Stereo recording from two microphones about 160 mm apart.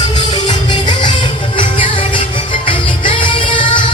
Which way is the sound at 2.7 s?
35° left (ahead or behind).